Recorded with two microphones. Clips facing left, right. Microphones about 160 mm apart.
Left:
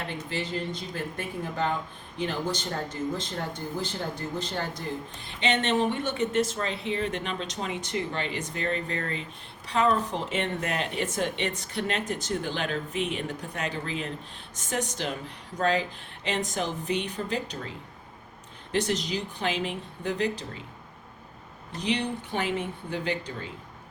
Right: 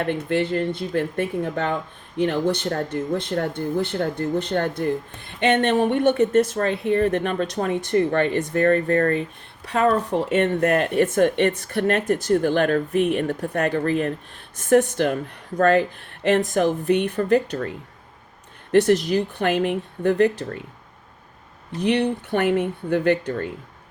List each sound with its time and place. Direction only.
0.0 s speech: 60° right (ahead or behind)
21.8 s speech: 60° right (ahead or behind)